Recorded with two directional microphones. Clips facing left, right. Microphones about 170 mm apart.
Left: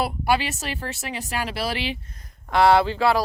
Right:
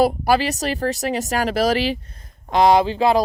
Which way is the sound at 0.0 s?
40° right (ahead or behind).